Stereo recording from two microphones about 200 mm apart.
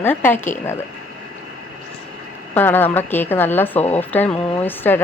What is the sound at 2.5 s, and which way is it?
Speech, 10° left (ahead or behind).